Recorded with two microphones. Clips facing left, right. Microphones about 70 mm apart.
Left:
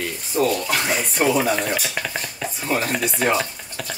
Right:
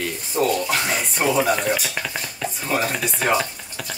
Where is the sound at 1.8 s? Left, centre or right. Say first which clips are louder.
Left 1 dB; centre.